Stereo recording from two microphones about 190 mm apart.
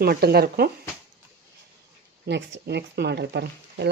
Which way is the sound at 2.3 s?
65° right (ahead or behind).